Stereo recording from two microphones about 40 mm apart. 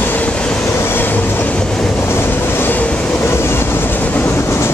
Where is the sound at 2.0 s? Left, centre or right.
Left.